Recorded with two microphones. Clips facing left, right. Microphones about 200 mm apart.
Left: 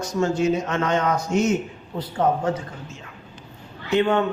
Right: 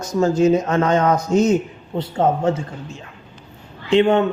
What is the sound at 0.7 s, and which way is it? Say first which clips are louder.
Speech: right 5 dB; 40° right (ahead or behind).